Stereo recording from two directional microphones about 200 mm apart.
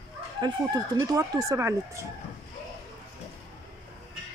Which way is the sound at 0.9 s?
15° right (ahead or behind).